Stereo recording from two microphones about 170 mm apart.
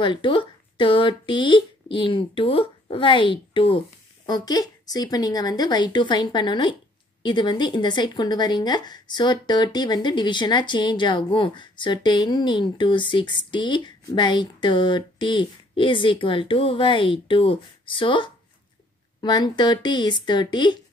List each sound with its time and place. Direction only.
0.0 s speech: 30° left (ahead or behind)